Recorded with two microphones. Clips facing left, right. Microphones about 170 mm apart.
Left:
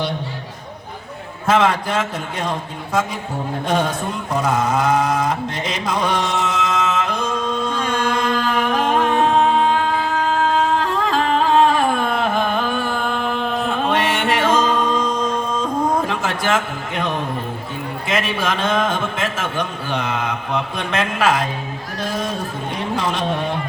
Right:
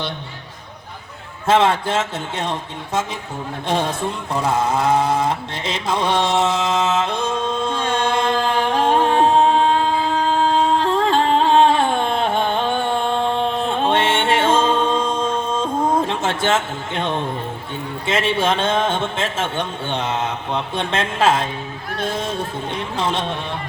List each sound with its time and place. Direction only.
1.5 s a man's voice: 30° right (ahead or behind)
4.4 s carnatic music: 30° right (ahead or behind)
18.1 s a man's voice: 25° right (ahead or behind)